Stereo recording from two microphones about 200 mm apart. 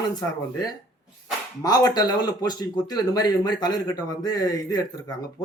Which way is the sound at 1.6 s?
20° left (ahead or behind).